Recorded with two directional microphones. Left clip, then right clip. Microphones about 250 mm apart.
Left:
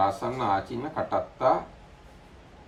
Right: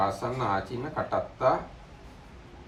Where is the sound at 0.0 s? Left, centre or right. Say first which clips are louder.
Left 2 dB; left.